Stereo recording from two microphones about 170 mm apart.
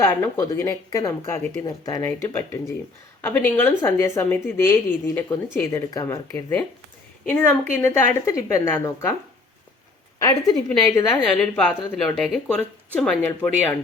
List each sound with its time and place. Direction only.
0.1 s a woman's voice: 15° left (ahead or behind)
10.2 s speech: 20° left (ahead or behind)
10.7 s speech: 10° left (ahead or behind)